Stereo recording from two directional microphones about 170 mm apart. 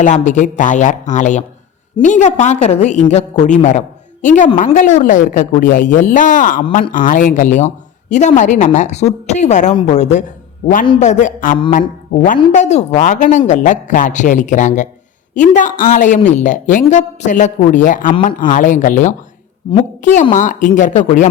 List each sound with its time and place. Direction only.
0.0 s a woman's voice: 45° left (ahead or behind)